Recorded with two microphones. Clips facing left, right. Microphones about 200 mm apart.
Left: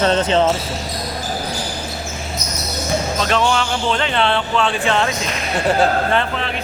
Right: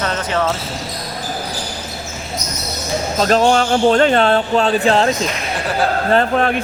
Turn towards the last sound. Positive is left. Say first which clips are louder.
# right 6 dB
turn(degrees=-45)  # may be behind; listen again after turning